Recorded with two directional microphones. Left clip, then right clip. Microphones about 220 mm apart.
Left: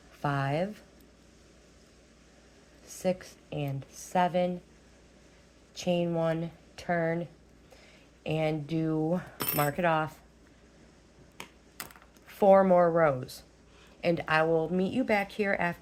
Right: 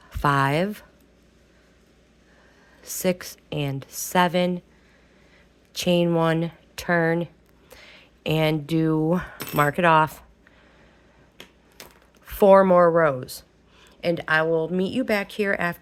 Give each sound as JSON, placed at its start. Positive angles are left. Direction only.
{"t": 0.1, "sound": "speech", "side_deg": -50}
{"t": 2.8, "sound": "speech", "side_deg": -50}
{"t": 5.7, "sound": "speech", "side_deg": -50}
{"t": 12.2, "sound": "a woman's voice", "side_deg": -40}